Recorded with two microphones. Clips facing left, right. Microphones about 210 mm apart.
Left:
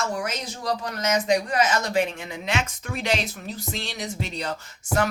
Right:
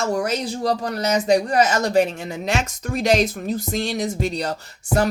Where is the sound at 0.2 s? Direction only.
35° right (ahead or behind).